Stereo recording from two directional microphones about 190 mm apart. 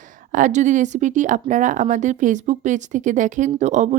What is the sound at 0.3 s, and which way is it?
Speech, 40° right (ahead or behind).